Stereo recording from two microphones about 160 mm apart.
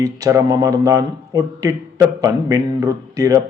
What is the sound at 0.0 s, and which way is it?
Speech, 20° right (ahead or behind).